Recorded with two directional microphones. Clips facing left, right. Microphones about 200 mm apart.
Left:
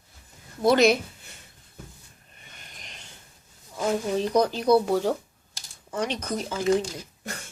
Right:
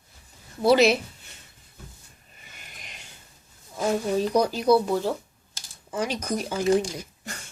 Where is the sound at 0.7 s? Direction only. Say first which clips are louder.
Right 1 dB; 5° right (ahead or behind).